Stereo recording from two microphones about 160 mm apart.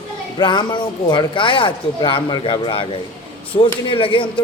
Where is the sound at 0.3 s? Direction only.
30° left (ahead or behind).